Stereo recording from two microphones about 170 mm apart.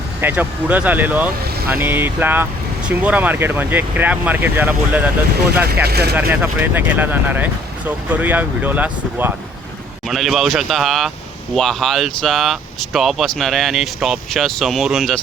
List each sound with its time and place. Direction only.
0.2 s speech: 10° right (ahead or behind)
5.8 s speech: 70° right (ahead or behind)
6.4 s speech: 10° right (ahead or behind)